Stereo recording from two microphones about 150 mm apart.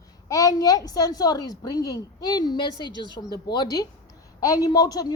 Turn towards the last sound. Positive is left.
turn(degrees=25)  # may be behind; listen again after turning